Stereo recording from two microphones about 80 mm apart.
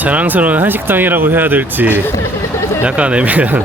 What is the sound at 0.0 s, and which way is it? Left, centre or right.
Speech, centre.